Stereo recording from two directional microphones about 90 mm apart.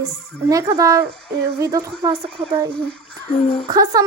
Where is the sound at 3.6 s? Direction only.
45° right (ahead or behind).